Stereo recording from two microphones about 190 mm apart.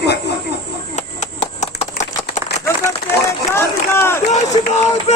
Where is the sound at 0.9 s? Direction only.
35° left (ahead or behind).